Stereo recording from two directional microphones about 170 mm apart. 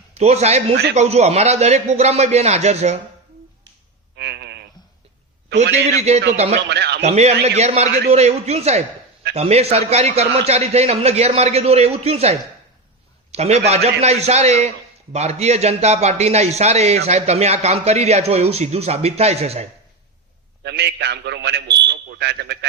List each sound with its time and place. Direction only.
0.1 s a man's voice: 40° right (ahead or behind)
4.1 s a sound: 85° right
5.9 s a man's voice: 40° right (ahead or behind)
6.7 s a sound: 85° right
7.0 s a man's voice: 40° right (ahead or behind)
20.7 s a man's voice: 90° right